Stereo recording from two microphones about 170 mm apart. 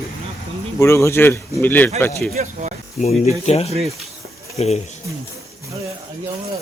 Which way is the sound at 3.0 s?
40° left (ahead or behind).